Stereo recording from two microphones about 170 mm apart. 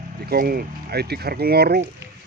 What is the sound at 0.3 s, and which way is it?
Speech, 60° right (ahead or behind).